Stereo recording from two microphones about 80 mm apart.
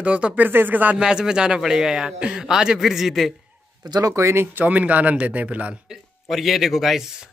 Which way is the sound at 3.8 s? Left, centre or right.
Right.